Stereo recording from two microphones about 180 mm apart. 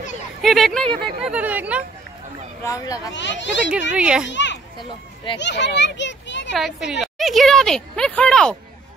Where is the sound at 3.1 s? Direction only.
80° left.